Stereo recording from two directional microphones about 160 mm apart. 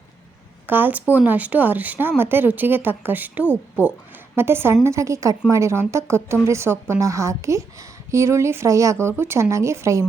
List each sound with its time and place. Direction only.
0.7 s a woman's voice: 10° right (ahead or behind)
3.4 s speech: 15° left (ahead or behind)
4.4 s a woman's voice: 15° right (ahead or behind)